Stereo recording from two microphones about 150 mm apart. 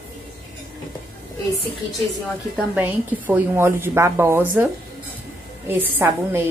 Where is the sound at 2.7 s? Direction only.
15° right (ahead or behind).